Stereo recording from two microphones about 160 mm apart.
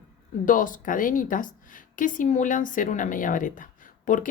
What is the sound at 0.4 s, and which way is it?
Speech, 55° left (ahead or behind).